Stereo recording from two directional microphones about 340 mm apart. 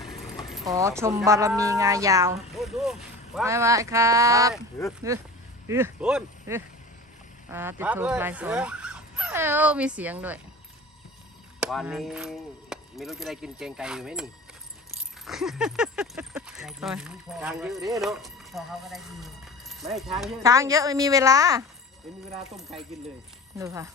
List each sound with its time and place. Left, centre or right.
0.0 s speech: centre
11.6 s speech: centre